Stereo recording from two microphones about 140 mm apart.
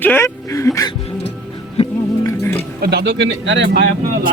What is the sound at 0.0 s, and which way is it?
Speech, 15° left (ahead or behind).